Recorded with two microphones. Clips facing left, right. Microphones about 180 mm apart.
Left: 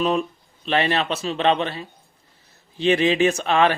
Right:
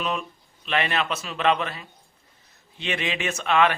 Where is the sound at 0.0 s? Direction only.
35° left (ahead or behind).